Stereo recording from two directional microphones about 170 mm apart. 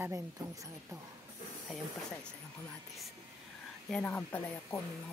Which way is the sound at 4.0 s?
10° left (ahead or behind).